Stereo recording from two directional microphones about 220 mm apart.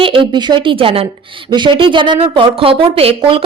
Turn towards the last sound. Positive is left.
turn(degrees=-25)  # may be behind; listen again after turning